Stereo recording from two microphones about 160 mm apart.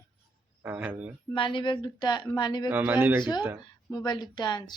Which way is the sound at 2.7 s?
10° right (ahead or behind).